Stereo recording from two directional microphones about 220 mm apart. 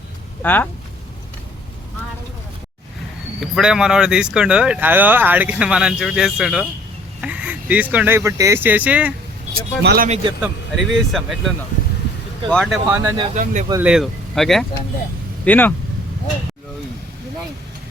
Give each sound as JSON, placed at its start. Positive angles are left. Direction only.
{"t": 0.4, "sound": "speech", "side_deg": 10}
{"t": 3.4, "sound": "speech", "side_deg": 0}
{"t": 9.6, "sound": "speech", "side_deg": -45}
{"t": 10.4, "sound": "speech", "side_deg": 0}
{"t": 12.9, "sound": "speech", "side_deg": -10}
{"t": 13.3, "sound": "speech", "side_deg": -35}
{"t": 13.8, "sound": "speech", "side_deg": 0}